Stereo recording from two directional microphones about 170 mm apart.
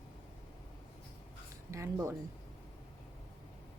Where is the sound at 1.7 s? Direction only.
15° right (ahead or behind).